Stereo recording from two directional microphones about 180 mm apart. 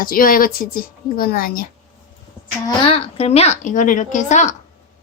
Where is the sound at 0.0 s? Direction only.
50° left (ahead or behind).